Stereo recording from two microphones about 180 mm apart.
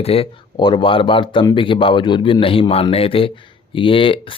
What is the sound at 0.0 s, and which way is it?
Speech, 35° left (ahead or behind).